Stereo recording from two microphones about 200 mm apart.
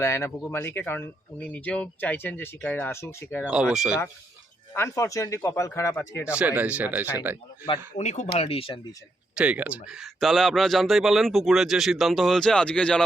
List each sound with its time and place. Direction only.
0.0 s speech: 15° left (ahead or behind)
3.4 s speech: 5° right (ahead or behind)
4.7 s speech: 15° left (ahead or behind)
6.4 s speech: 5° right (ahead or behind)
7.9 s speech: 35° left (ahead or behind)
9.3 s speech: 5° right (ahead or behind)